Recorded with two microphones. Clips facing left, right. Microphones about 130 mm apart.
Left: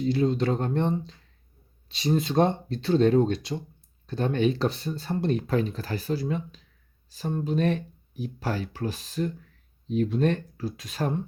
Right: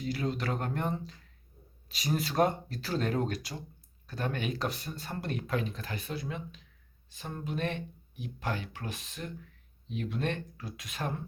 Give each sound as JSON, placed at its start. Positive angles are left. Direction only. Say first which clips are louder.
{"t": 0.1, "sound": "speech", "louder": "left 8 dB", "side_deg": 25}